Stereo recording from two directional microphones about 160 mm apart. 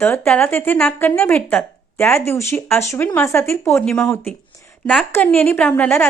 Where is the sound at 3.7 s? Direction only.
5° left (ahead or behind).